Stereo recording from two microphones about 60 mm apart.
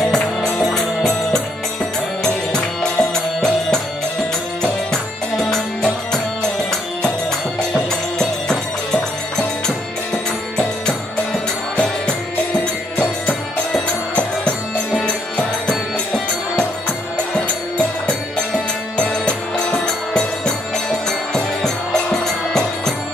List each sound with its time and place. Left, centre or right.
0.0 s music: centre
5.4 s music: centre
7.7 s music: centre
11.7 s music: centre
14.1 s music: centre
18.9 s music: centre